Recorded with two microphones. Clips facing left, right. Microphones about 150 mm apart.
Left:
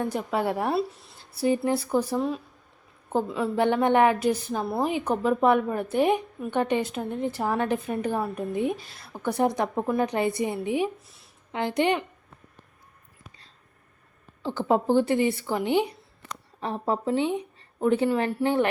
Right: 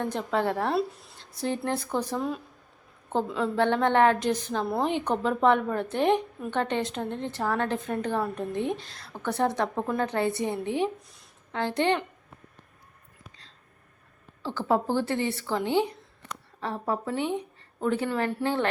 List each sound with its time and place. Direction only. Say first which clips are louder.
0.0 s a woman's voice: left 1 dB; 10° left (ahead or behind)
11.5 s a woman's voice: left 1 dB; 15° left (ahead or behind)
14.4 s a woman's voice: left 3 dB; 20° left (ahead or behind)